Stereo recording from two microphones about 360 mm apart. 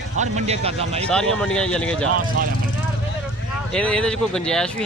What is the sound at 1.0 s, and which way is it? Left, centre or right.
Speech, centre.